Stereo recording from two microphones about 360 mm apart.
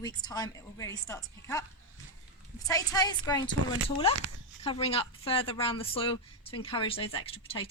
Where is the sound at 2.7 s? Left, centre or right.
Centre.